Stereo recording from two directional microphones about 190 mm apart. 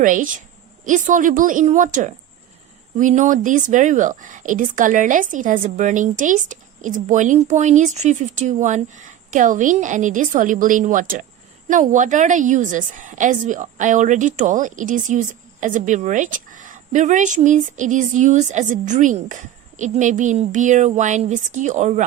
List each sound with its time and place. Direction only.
0.0 s a woman's voice: 45° right (ahead or behind)